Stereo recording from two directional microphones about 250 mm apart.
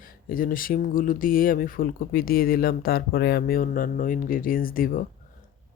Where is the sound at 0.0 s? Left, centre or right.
Left.